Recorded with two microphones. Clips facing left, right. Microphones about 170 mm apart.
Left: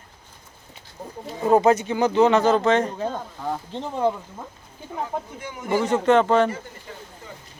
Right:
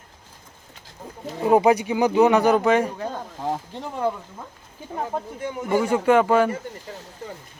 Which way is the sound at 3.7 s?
20° left (ahead or behind).